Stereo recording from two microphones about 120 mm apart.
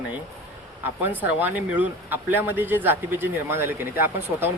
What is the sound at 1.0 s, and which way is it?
Speech, 15° right (ahead or behind).